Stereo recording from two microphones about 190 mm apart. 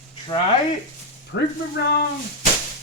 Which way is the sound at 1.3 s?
65° left (ahead or behind).